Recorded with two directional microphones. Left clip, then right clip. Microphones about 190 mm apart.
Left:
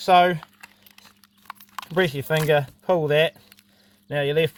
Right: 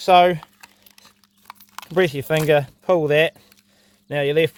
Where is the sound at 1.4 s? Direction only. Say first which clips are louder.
Left 2 dB; 35° right (ahead or behind).